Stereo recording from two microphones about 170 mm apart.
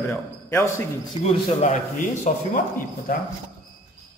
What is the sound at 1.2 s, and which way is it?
Speech, 40° left (ahead or behind).